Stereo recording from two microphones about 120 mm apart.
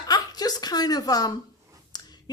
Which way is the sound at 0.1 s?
35° left (ahead or behind).